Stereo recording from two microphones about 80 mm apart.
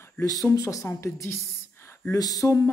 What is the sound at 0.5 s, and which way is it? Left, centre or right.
Speech, left.